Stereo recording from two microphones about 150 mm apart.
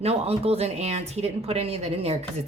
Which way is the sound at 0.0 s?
40° right (ahead or behind).